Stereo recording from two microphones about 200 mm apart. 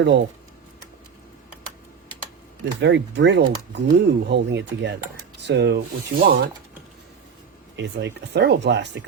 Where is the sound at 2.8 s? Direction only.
60° right (ahead or behind).